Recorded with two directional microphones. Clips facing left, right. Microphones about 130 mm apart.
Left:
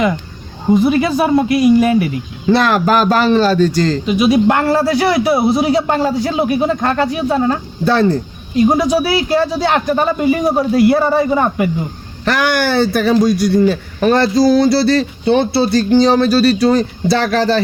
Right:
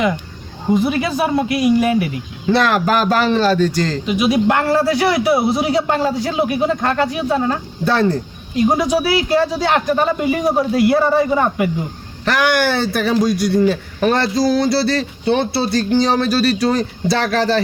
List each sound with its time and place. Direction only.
0.9 s a man's voice: 40° left (ahead or behind)